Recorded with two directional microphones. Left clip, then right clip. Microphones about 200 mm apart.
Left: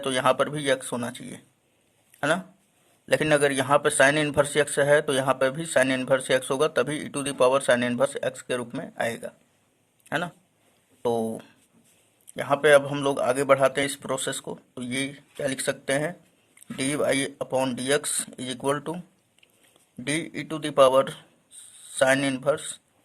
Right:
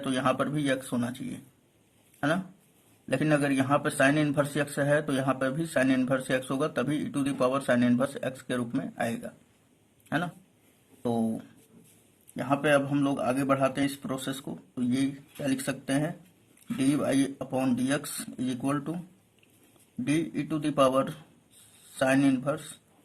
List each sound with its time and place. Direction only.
0.0 s a man's voice: 35° left (ahead or behind)
3.1 s a man's voice: 35° left (ahead or behind)
20.1 s a man's voice: 40° left (ahead or behind)